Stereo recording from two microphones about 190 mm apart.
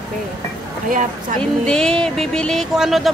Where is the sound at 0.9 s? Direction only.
45° right (ahead or behind).